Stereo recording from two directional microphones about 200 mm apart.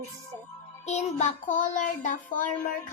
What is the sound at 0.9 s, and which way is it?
Child singing, 35° left (ahead or behind).